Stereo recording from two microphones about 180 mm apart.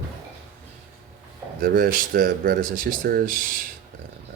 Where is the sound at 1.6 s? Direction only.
55° right (ahead or behind).